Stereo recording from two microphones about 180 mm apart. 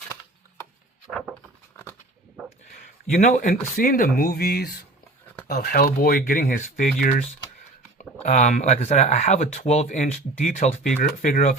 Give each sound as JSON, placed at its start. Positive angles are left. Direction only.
{"t": 1.7, "sound": "a sound", "side_deg": 10}
{"t": 3.1, "sound": "speech", "side_deg": 45}
{"t": 8.2, "sound": "speech", "side_deg": 40}